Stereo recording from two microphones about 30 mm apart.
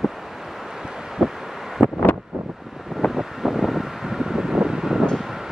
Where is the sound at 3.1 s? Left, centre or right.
Centre.